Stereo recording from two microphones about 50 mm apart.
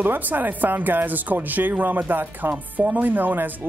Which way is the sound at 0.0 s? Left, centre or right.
Right.